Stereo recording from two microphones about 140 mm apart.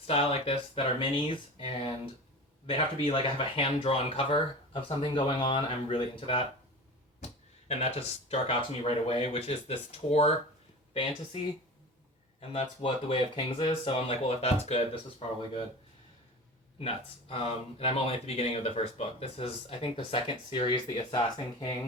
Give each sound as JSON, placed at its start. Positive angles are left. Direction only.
{"t": 0.1, "sound": "speech", "side_deg": 45}
{"t": 7.7, "sound": "speech", "side_deg": 50}
{"t": 12.4, "sound": "speech", "side_deg": 45}
{"t": 16.8, "sound": "speech", "side_deg": 45}